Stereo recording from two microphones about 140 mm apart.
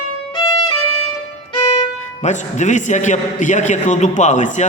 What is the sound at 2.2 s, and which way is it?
A man's voice, 60° left (ahead or behind).